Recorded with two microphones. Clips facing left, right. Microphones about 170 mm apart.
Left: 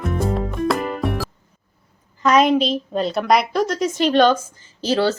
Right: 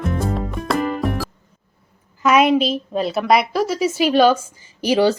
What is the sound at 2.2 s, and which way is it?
A woman's voice, 5° right (ahead or behind).